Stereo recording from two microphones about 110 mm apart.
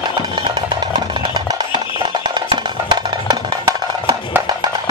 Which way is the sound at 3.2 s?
40° right (ahead or behind).